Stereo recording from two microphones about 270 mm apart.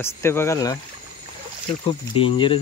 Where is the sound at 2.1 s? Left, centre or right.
Centre.